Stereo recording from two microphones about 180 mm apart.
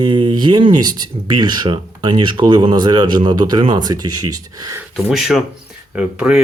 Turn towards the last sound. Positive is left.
turn(degrees=-5)  # may be behind; listen again after turning